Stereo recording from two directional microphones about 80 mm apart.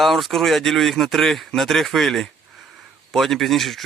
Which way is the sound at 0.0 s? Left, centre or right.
Centre.